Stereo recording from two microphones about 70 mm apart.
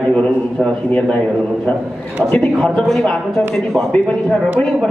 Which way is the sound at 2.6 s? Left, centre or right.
Centre.